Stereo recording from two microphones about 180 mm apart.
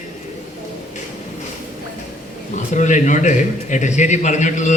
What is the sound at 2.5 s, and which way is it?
Speech, 40° left (ahead or behind).